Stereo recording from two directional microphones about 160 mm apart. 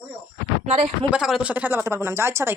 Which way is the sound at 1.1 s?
5° right (ahead or behind).